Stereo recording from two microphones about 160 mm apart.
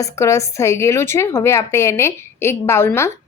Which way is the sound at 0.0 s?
20° left (ahead or behind).